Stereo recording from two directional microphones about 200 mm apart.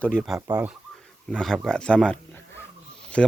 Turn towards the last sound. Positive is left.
turn(degrees=5)  # may be behind; listen again after turning